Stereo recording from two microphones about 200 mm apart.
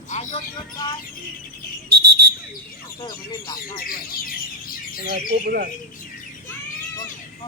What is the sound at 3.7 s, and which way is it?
Speech, 45° left (ahead or behind).